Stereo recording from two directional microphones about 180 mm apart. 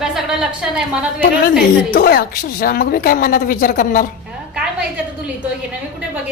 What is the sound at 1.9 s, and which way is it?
A woman's voice, 60° left (ahead or behind).